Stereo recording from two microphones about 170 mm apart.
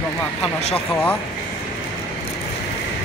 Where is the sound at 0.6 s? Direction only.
40° left (ahead or behind).